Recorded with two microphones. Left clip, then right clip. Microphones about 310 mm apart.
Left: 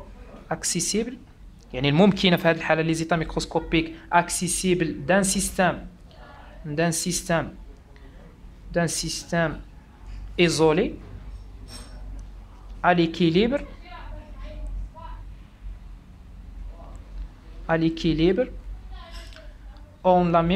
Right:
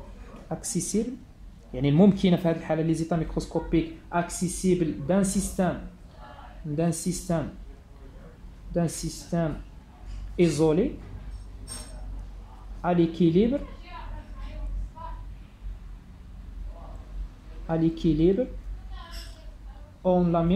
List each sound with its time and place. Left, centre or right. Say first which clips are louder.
0.5 s speech: left 5 dB; left
6.8 s speech: left 5 dB; left
8.7 s speech: left 5 dB; left
12.8 s speech: left 4 dB; left
17.6 s speech: left 3 dB; left
20.0 s speech: left 5 dB; left